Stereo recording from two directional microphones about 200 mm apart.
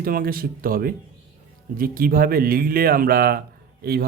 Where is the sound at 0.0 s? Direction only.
45° right (ahead or behind).